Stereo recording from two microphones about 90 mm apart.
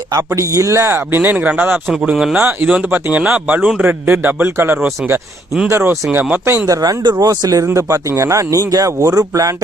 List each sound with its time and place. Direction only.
0.1 s speech: 35° right (ahead or behind); by 1.8 s 20° right (ahead or behind)
1.9 s speech: 5° right (ahead or behind)
2.3 s speech: 20° right (ahead or behind)
6.7 s speech: 50° right (ahead or behind)
7.2 s speech: 40° right (ahead or behind)